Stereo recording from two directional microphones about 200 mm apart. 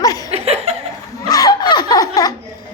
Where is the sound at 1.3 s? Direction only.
20° left (ahead or behind).